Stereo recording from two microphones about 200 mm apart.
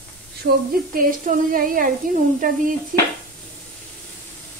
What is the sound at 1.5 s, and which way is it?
Speech, 45° right (ahead or behind).